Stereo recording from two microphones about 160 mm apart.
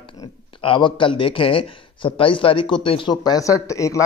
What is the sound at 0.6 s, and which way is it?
Speech, 30° left (ahead or behind).